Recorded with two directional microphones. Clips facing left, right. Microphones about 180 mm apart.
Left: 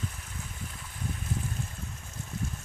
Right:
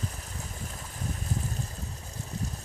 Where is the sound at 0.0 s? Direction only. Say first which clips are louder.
Right 1 dB; 40° right (ahead or behind).